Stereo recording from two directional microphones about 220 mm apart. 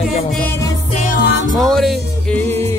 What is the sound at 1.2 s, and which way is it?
Music, 55° left (ahead or behind).